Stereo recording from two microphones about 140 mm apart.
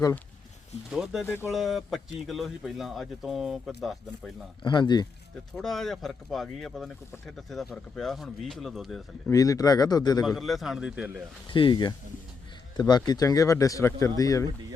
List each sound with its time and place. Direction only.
0.9 s speech: 5° right (ahead or behind)
1.2 s speech: 15° left (ahead or behind)
1.5 s speech: centre (ahead or behind)
4.6 s speech: 35° left (ahead or behind)
5.5 s speech: centre (ahead or behind)
9.3 s speech: 25° left (ahead or behind)
10.2 s speech: centre (ahead or behind)
11.4 s speech: 35° left (ahead or behind)